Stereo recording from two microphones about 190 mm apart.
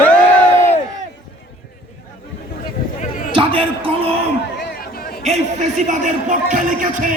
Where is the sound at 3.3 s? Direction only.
25° right (ahead or behind).